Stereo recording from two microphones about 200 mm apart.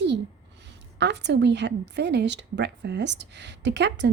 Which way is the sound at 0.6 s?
60° right (ahead or behind).